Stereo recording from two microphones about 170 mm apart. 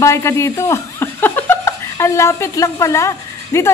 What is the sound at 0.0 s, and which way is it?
Speech, 15° left (ahead or behind).